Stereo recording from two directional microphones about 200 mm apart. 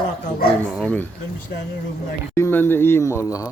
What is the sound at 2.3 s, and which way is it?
Speech, 10° left (ahead or behind).